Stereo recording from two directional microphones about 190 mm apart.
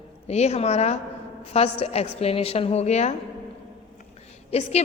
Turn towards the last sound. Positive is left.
turn(degrees=35)  # may be behind; listen again after turning